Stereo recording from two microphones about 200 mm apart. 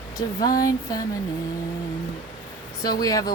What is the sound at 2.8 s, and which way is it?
Speech, 20° left (ahead or behind).